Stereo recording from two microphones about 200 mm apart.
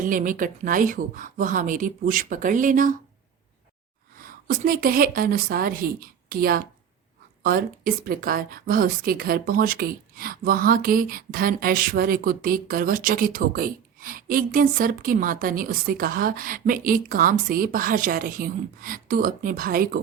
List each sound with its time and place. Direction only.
0.0 s a woman's voice: 40° right (ahead or behind)
4.2 s speech: 45° right (ahead or behind)